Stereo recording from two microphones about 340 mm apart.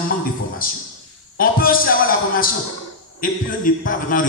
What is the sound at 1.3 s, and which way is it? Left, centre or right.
A man's voice, left.